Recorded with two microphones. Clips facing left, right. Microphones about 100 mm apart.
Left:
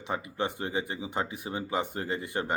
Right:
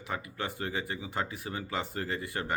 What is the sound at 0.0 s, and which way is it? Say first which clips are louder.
Speech: left 4 dB; 20° left (ahead or behind).